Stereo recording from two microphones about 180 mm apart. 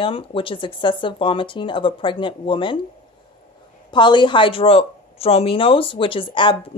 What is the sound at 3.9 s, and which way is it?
Speech, 25° left (ahead or behind).